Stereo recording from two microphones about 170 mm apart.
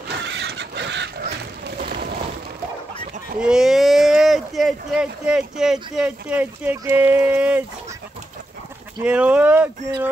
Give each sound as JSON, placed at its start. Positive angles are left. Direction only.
{"t": 0.2, "sound": "pig", "side_deg": -90}
{"t": 1.8, "sound": "a sound", "side_deg": -65}
{"t": 3.3, "sound": "speech", "side_deg": -5}
{"t": 9.0, "sound": "speech", "side_deg": -10}